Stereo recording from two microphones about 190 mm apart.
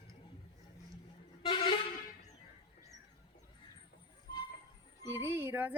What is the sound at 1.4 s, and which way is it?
Vehicle horn, 25° left (ahead or behind).